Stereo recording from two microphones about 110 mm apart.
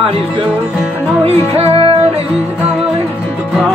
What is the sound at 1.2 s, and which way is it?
Music, 60° right (ahead or behind).